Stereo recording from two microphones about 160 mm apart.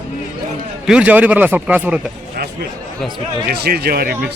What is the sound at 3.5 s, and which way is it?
Speech, 80° right.